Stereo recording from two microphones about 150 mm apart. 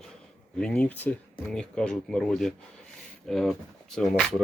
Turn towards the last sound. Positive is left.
turn(degrees=5)  # may be behind; listen again after turning